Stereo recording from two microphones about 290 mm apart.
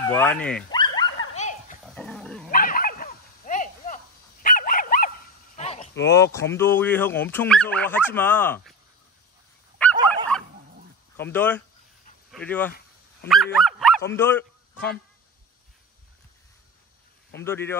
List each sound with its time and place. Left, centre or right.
0.0 s speech: centre
0.7 s dog: centre
2.0 s dog: centre
2.5 s dog: left
5.6 s a sound: left
6.3 s speech: centre
9.9 s dog: centre
11.1 s speech: centre
13.3 s dog: centre
14.1 s a man's voice: centre
17.4 s speech: centre